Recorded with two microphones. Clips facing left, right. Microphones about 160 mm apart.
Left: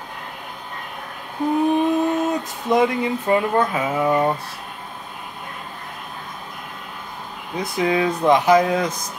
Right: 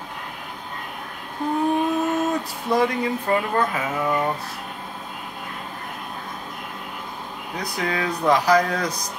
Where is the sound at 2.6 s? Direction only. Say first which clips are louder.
Left 3 dB; 20° left (ahead or behind).